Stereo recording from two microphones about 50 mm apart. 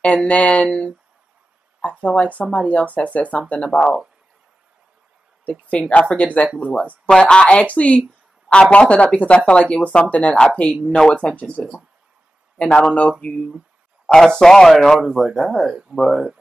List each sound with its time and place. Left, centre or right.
0.0 s speech: left
3.7 s speech: centre
5.5 s speech: left
12.5 s speech: left
14.0 s speech: centre